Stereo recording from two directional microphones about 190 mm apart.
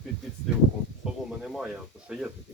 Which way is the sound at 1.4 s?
5° right (ahead or behind).